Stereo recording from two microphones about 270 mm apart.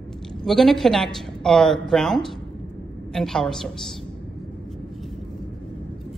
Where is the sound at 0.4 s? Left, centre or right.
Centre.